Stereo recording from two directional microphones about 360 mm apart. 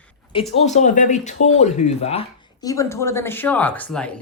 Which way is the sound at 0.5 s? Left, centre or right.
Centre.